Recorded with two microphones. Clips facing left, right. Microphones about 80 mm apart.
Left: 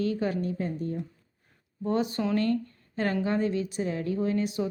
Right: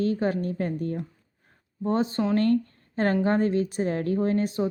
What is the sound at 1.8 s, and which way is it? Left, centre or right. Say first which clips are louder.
Speech: right 3 dB; right.